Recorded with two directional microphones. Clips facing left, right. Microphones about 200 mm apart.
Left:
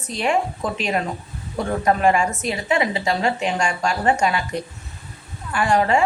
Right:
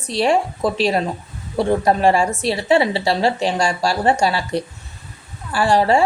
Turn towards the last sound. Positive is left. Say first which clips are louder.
# right 3 dB
turn(degrees=-35)  # may be behind; listen again after turning